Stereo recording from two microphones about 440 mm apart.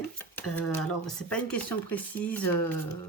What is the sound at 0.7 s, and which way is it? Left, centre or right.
Speech, centre.